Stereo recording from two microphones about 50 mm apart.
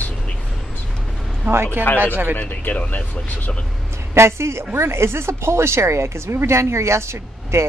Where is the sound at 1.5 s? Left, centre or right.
Right.